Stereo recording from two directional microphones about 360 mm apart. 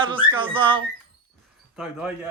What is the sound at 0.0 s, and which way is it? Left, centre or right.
Whistling, centre.